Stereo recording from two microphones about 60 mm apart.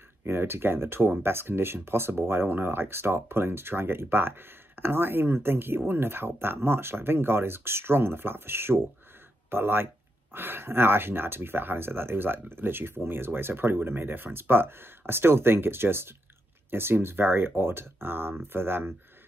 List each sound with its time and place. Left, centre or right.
0.2 s speech: right